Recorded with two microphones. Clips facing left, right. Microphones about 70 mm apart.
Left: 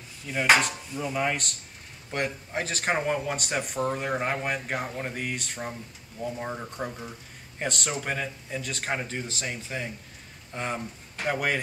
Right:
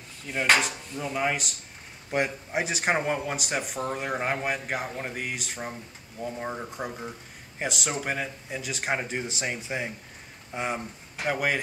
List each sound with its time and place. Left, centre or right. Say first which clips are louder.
0.3 s speech: left 2 dB; centre